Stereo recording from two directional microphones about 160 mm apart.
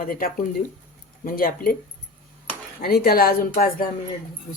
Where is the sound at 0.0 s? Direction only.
65° left (ahead or behind).